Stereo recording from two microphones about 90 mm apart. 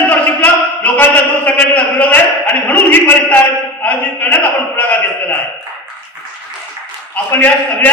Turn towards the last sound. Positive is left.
turn(degrees=20)  # may be behind; listen again after turning